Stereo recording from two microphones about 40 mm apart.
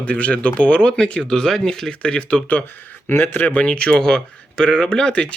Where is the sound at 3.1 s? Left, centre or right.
Left.